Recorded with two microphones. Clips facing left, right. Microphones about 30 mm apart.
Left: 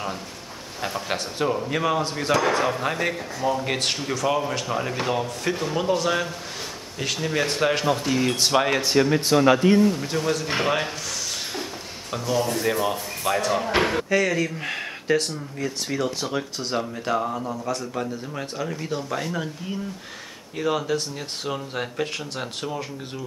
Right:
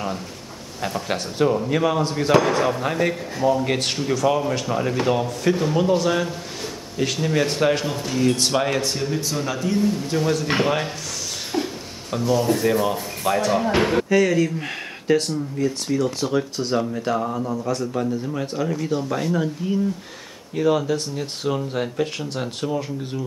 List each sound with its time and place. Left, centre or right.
0.7 s speech: centre
8.1 s speech: centre
9.3 s speech: left
9.8 s speech: centre
12.1 s speech: centre
15.5 s speech: centre